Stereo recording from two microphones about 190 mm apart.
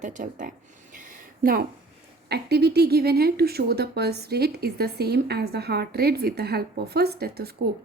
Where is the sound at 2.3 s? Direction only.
60° right (ahead or behind).